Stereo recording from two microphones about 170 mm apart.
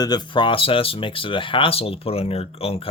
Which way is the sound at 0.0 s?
25° left (ahead or behind).